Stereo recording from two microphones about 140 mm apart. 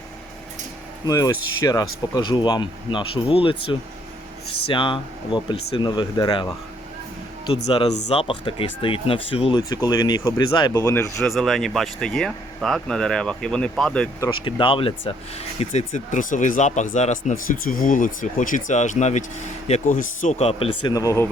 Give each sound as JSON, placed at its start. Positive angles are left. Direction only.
{"t": 1.0, "sound": "speech", "side_deg": 25}
{"t": 7.5, "sound": "speech", "side_deg": 45}
{"t": 10.8, "sound": "speech", "side_deg": 15}
{"t": 11.3, "sound": "speech", "side_deg": 0}
{"t": 14.4, "sound": "speech", "side_deg": 35}
{"t": 16.1, "sound": "speech", "side_deg": 65}
{"t": 20.4, "sound": "speech", "side_deg": 45}
{"t": 20.9, "sound": "speech", "side_deg": 25}